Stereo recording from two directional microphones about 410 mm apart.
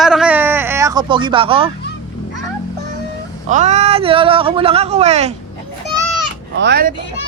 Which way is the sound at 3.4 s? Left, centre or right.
Centre.